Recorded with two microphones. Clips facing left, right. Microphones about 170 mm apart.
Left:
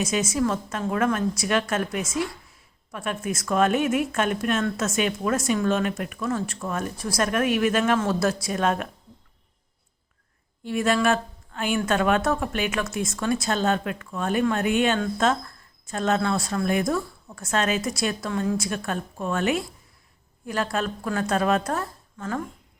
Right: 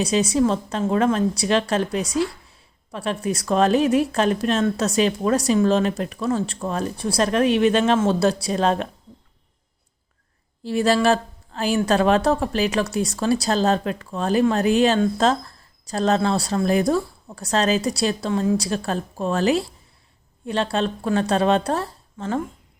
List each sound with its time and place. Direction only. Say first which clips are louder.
0.0 s speech: right 5 dB; 30° right (ahead or behind)
10.6 s speech: right 4 dB; 30° right (ahead or behind)